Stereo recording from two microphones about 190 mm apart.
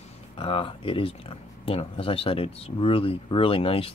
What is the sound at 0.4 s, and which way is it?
Speech, 30° left (ahead or behind).